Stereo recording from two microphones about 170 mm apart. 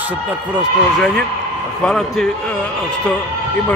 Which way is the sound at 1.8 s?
5° left (ahead or behind).